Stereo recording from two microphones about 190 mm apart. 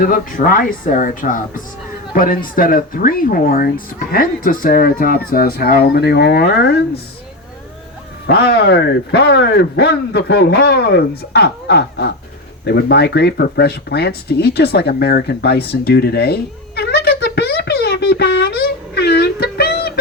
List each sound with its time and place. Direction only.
0.0 s speech: 45° left (ahead or behind)
8.3 s a man's voice: 60° left (ahead or behind)
12.6 s a sound: 60° left (ahead or behind)